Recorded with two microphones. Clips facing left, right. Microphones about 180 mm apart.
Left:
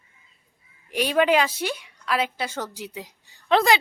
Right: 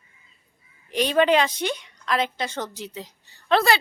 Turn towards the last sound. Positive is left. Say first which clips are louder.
# left 1 dB
turn(degrees=15)  # may be behind; listen again after turning